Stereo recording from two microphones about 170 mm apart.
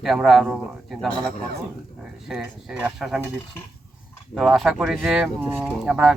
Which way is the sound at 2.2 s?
5° right (ahead or behind).